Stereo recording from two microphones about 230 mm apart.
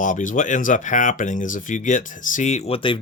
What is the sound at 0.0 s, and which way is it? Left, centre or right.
Speech, left.